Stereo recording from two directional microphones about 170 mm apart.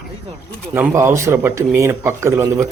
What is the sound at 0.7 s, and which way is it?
A man's voice, 15° right (ahead or behind).